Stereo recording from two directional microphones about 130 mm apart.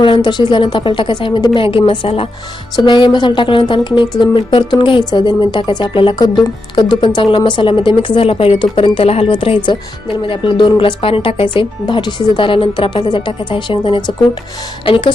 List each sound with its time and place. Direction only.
0.0 s a woman's voice: 35° left (ahead or behind)